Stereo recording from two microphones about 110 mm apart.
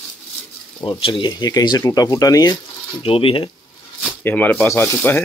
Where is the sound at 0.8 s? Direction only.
50° left (ahead or behind); by 2.5 s 35° left (ahead or behind).